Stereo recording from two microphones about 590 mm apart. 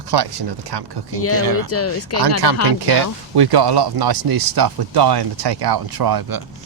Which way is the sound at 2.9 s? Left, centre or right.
Right.